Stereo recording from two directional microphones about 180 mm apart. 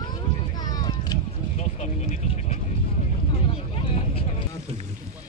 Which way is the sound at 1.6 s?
40° left (ahead or behind).